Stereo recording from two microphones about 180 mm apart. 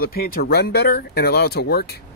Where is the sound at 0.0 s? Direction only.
55° left (ahead or behind).